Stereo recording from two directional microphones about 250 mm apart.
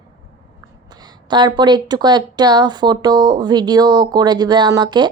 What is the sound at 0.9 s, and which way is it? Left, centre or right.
Speech, centre.